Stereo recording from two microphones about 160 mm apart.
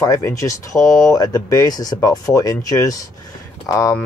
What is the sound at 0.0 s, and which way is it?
Speech, 20° left (ahead or behind).